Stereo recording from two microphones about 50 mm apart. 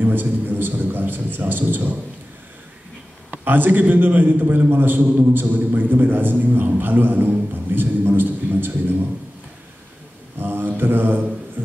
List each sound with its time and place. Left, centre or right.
0.0 s a sound: right
3.3 s a man's voice: right
10.4 s mantra: right